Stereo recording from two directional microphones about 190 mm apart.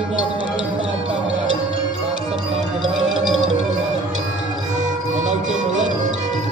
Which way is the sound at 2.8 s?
5° right (ahead or behind).